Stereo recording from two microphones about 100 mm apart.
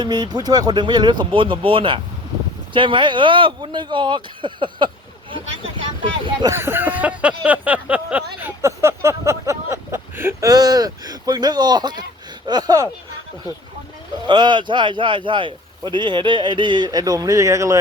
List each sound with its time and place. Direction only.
0.0 s a man's voice: 45° right (ahead or behind)
6.5 s a sound: 25° right (ahead or behind)
10.4 s a man's voice: 40° right (ahead or behind)
14.3 s a man's voice: 50° right (ahead or behind); by 17.7 s 35° right (ahead or behind)